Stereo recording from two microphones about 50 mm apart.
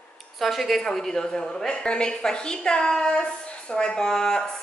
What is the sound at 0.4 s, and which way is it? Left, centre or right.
A woman's voice, centre.